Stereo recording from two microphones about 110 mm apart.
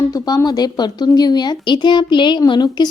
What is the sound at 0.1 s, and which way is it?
A woman's voice, 35° left (ahead or behind).